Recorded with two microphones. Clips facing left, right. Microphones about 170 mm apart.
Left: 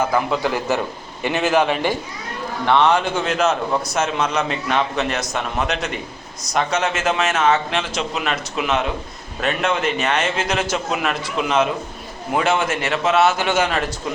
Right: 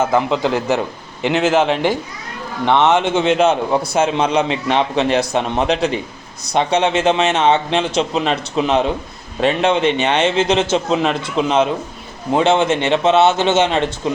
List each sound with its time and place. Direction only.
0.0 s a man's voice: 20° right (ahead or behind)